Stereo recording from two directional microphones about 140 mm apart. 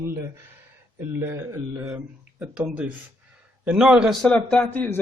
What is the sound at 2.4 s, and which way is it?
Speech, 10° right (ahead or behind).